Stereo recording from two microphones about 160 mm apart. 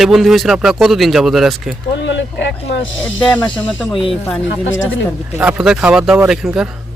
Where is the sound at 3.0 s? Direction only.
10° left (ahead or behind).